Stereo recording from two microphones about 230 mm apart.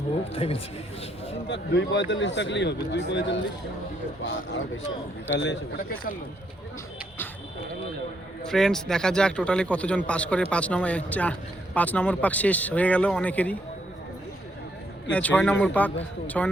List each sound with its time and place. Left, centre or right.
0.3 s speech: left
1.5 s speech: left
8.4 s a man's voice: centre
15.1 s speech: centre